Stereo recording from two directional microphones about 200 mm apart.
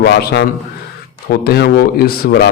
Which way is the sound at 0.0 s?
50° left (ahead or behind).